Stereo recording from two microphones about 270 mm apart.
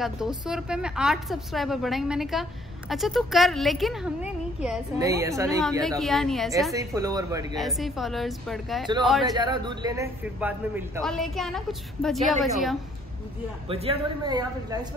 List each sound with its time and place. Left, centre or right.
0.0 s a man's voice: centre
5.9 s a man's voice: centre
6.7 s a man's voice: centre
7.5 s a man's voice: centre
9.3 s a man's voice: centre
13.7 s a man's voice: right